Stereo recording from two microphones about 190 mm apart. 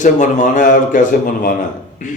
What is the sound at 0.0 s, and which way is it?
Speech, 40° left (ahead or behind).